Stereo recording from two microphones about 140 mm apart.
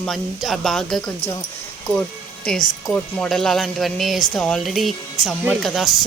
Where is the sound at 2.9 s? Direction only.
5° left (ahead or behind).